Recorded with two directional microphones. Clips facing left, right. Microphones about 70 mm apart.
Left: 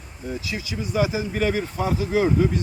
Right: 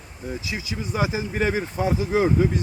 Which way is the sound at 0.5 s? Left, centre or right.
Right.